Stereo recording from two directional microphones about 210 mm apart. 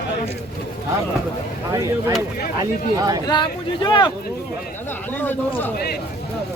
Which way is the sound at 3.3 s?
20° left (ahead or behind).